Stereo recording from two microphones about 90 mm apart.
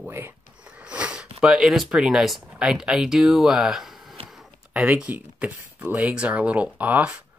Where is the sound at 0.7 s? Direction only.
10° right (ahead or behind).